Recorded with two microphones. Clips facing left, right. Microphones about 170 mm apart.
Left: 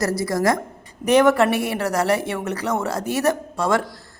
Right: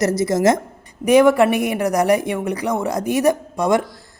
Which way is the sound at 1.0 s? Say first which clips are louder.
Right 3 dB; 10° right (ahead or behind).